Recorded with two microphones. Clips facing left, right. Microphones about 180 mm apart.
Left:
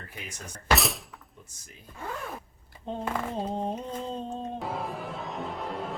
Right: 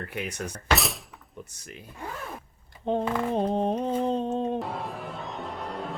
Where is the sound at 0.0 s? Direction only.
65° right (ahead or behind).